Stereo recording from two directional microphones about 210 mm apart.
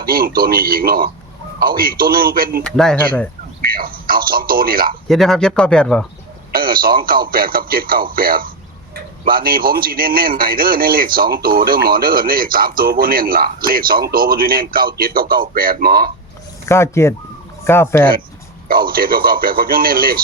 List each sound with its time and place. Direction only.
0.0 s a man's voice: 45° right (ahead or behind)
2.6 s speech: 5° left (ahead or behind)
3.6 s a man's voice: 45° right (ahead or behind)
5.0 s speech: centre (ahead or behind)
6.5 s radio: 45° right (ahead or behind)
7.0 s a man's voice: 45° right (ahead or behind)
16.6 s speech: 10° left (ahead or behind)
18.7 s a man's voice: 45° right (ahead or behind)